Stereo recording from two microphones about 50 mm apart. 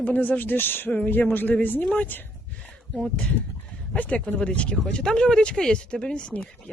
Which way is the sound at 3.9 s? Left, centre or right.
Left.